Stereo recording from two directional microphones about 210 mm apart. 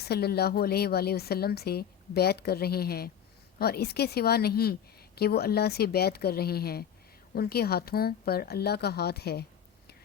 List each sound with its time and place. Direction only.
0.0 s a woman's voice: 50° left (ahead or behind)